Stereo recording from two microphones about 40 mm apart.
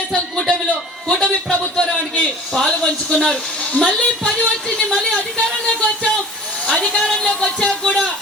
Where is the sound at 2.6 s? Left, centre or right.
Centre.